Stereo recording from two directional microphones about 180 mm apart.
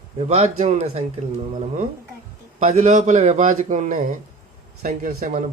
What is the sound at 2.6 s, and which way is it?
A man's voice, 40° right (ahead or behind).